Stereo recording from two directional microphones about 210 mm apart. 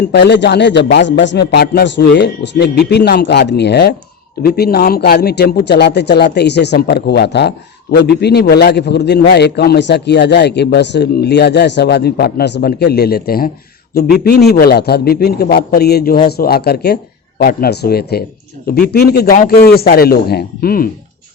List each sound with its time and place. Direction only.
0.0 s a man's voice: 50° left (ahead or behind)